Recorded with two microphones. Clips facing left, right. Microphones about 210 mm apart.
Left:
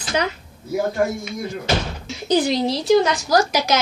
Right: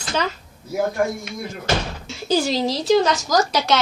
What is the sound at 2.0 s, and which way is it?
Speech, 15° left (ahead or behind).